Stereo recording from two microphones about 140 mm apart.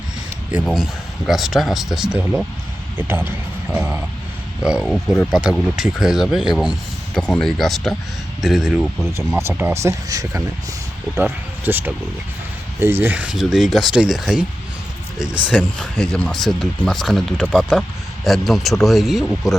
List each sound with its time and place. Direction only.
0.5 s speech: 5° right (ahead or behind)
3.0 s speech: 15° right (ahead or behind)
6.6 s a sound: 5° right (ahead or behind)
7.2 s speech: 5° left (ahead or behind)
9.0 s speech: 20° right (ahead or behind)
15.5 s speech: 5° left (ahead or behind)